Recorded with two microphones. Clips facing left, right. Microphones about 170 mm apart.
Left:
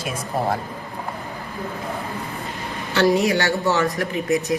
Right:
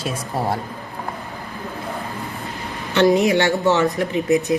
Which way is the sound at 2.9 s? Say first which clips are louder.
Right 3 dB; 20° right (ahead or behind).